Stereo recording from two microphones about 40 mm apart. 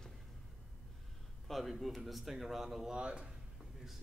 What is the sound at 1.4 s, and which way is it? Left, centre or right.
A man's voice, centre.